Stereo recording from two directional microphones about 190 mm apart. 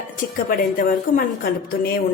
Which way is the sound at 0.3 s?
50° left (ahead or behind).